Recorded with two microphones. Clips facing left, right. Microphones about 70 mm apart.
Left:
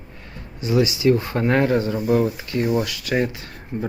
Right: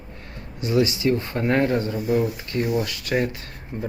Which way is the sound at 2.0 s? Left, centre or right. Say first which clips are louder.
Left 3 dB; left.